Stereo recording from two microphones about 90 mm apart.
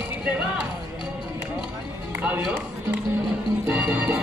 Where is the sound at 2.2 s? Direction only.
15° right (ahead or behind).